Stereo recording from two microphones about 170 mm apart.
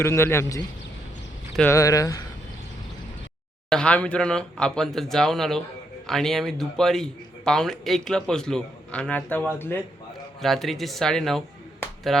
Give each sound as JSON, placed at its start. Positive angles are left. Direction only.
{"t": 0.0, "sound": "a man's voice", "side_deg": 15}
{"t": 1.7, "sound": "speech", "side_deg": 20}
{"t": 3.7, "sound": "a man's voice", "side_deg": 5}
{"t": 10.4, "sound": "a man's voice", "side_deg": 0}